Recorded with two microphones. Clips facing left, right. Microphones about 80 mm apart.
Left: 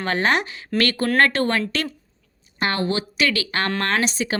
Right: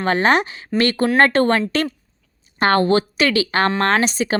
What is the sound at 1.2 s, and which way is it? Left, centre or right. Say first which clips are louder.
Speech: right 5 dB; right.